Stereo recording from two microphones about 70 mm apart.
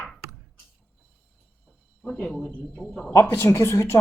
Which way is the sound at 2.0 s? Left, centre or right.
Centre.